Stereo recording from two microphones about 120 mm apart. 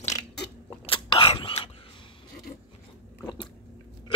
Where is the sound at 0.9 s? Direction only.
45° left (ahead or behind).